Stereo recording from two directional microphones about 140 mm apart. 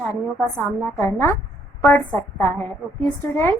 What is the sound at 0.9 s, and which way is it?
A woman's voice, 15° left (ahead or behind).